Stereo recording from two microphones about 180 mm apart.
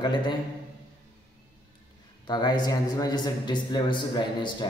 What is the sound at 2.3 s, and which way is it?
A man's voice, 25° left (ahead or behind).